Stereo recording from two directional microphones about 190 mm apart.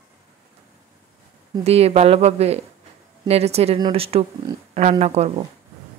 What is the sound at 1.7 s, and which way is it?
Speech, 30° right (ahead or behind).